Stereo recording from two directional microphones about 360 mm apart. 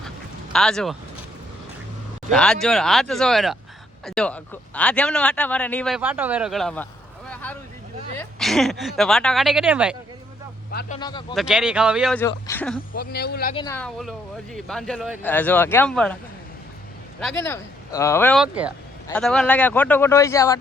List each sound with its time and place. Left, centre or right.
0.5 s a man's voice: centre
2.3 s a man's voice: centre
8.2 s a man's voice: centre
10.7 s speech: left
11.3 s a man's voice: centre
12.9 s speech: left
13.6 s a man's voice: centre
17.2 s a man's voice: centre